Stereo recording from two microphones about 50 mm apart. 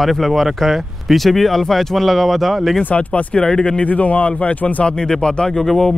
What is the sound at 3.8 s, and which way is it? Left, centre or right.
Speech, left.